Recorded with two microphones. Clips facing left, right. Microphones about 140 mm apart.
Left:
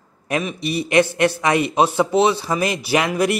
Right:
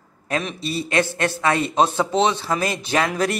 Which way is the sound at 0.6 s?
15° left (ahead or behind).